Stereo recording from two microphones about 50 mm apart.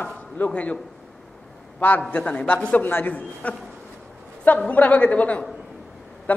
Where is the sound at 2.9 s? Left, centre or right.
Left.